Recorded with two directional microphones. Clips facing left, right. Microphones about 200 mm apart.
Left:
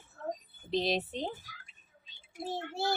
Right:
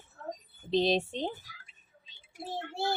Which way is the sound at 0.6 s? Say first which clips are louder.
Right 4 dB; 25° right (ahead or behind).